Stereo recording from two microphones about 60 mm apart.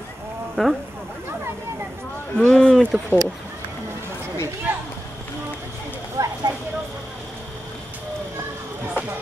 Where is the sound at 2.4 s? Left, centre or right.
Centre.